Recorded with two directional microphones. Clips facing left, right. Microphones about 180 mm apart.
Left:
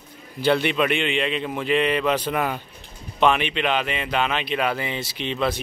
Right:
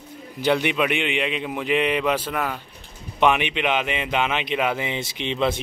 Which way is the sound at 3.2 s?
15° right (ahead or behind).